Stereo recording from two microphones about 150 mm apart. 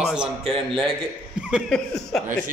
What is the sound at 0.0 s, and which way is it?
Speech, 5° right (ahead or behind).